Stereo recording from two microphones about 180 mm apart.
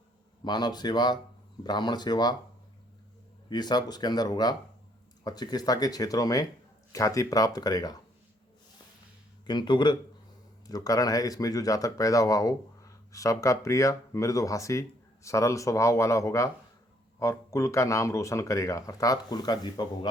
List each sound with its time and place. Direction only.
0.4 s speech: 25° left (ahead or behind)
3.5 s speech: 25° left (ahead or behind)
9.5 s speech: 25° left (ahead or behind)